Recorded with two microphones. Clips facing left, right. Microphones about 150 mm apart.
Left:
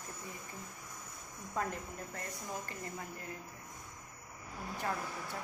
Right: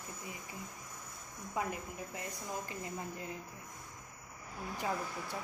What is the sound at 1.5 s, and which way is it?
Speech, 10° right (ahead or behind).